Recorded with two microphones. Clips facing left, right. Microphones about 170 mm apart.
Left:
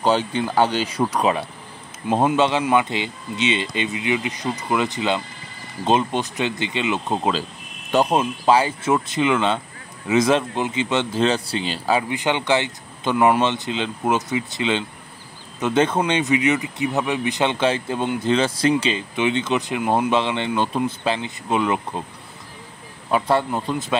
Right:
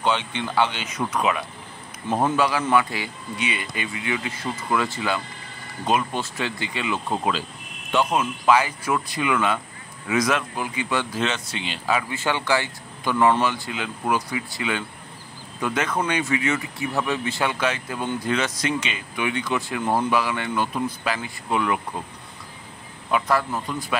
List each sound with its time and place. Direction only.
0.0 s speech: 40° left (ahead or behind); by 7.3 s 20° left (ahead or behind)
7.9 s speech: 35° left (ahead or behind)
11.2 s speech: 35° left (ahead or behind)
12.1 s speech: 20° left (ahead or behind)
23.1 s speech: 30° left (ahead or behind)